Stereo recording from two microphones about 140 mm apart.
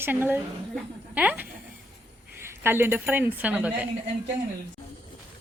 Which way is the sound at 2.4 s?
15° right (ahead or behind).